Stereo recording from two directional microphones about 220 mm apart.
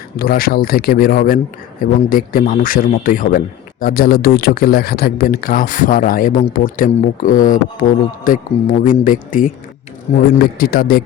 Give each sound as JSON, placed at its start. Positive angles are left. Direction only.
{"t": 0.2, "sound": "a man's voice", "side_deg": 40}